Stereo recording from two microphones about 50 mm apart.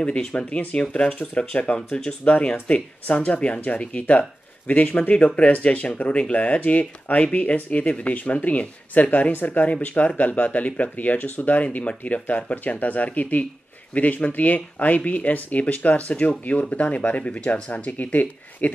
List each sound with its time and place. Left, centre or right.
0.0 s speech: left